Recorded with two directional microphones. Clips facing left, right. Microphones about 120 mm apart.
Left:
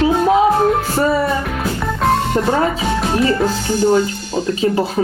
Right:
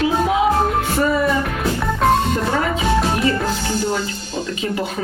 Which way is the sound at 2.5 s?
35° left (ahead or behind).